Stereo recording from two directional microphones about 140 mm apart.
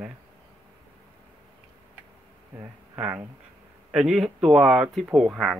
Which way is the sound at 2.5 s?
15° right (ahead or behind).